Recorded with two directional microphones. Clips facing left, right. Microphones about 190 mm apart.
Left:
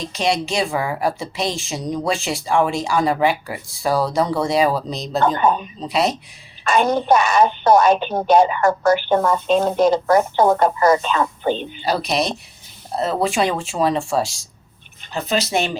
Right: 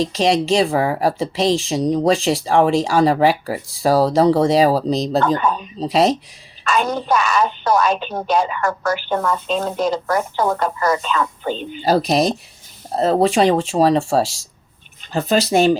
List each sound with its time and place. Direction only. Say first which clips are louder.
0.2 s a woman's voice: right 4 dB; 35° right (ahead or behind)
5.4 s speech: left 3 dB; 45° left (ahead or behind)
5.8 s a woman's voice: right 5 dB; 40° right (ahead or behind)
6.7 s speech: left 3 dB; 45° left (ahead or behind)
8.8 s a woman's voice: left 5 dB; 30° left (ahead or behind)
9.5 s speech: left 7 dB; 40° left (ahead or behind)
10.3 s a woman's voice: left 4 dB; 25° left (ahead or behind)
11.8 s a woman's voice: right 5 dB; 40° right (ahead or behind)